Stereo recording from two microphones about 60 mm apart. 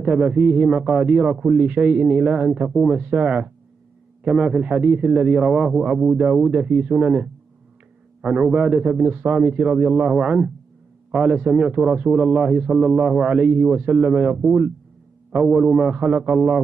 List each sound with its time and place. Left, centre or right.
0.0 s a man's voice: right
15.4 s a man's voice: centre
15.7 s a man's voice: centre